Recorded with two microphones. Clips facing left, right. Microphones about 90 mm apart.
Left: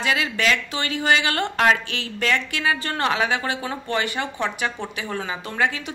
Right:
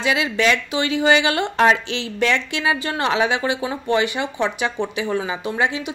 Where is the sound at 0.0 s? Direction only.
20° right (ahead or behind).